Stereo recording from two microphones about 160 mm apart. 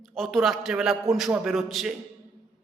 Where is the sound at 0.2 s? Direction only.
Centre (ahead or behind).